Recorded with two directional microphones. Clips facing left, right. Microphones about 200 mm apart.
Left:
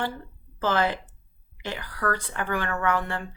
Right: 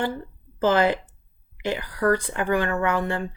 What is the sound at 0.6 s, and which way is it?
Speech, 15° right (ahead or behind).